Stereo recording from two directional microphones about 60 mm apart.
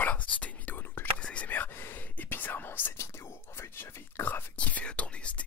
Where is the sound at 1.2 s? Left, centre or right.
Centre.